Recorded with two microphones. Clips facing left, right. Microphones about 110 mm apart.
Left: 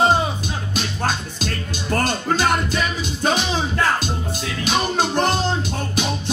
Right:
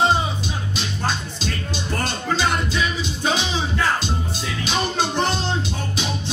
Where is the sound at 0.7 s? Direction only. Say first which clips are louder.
Left 3 dB; 50° left (ahead or behind).